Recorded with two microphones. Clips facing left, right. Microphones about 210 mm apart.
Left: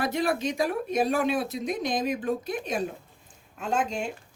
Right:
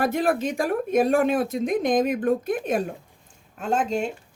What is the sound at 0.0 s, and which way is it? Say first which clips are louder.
Speech: right 4 dB; 50° right (ahead or behind).